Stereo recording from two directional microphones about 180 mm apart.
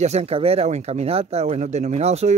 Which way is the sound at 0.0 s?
35° right (ahead or behind).